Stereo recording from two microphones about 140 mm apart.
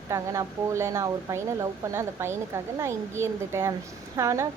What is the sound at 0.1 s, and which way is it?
A woman's voice, 20° right (ahead or behind).